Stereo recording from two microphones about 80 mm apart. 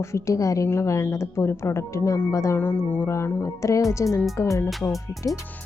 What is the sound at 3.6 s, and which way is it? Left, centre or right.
A woman's voice, left.